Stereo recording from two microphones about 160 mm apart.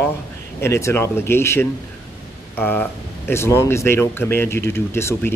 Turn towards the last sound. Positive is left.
turn(degrees=15)  # may be behind; listen again after turning